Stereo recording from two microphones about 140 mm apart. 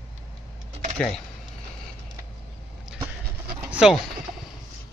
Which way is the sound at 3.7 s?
5° right (ahead or behind).